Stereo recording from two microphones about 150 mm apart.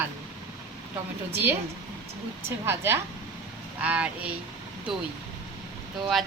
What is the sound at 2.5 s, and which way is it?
A woman's voice, 15° right (ahead or behind).